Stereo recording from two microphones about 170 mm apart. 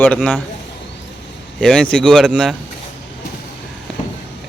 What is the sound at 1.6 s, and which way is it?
Speech, 5° left (ahead or behind).